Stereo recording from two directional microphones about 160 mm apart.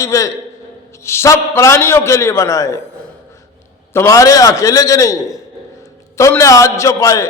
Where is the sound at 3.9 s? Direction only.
20° left (ahead or behind).